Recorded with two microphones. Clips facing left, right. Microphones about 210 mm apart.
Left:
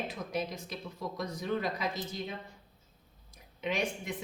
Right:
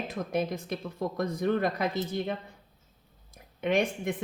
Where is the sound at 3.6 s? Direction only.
55° right (ahead or behind).